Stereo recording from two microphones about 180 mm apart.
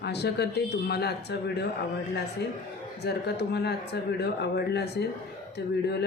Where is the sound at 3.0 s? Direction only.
65° left (ahead or behind).